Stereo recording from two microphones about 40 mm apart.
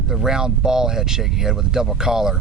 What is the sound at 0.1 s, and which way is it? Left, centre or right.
Speech, centre.